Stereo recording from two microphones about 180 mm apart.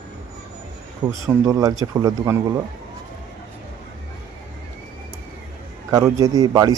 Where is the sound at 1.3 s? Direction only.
20° right (ahead or behind).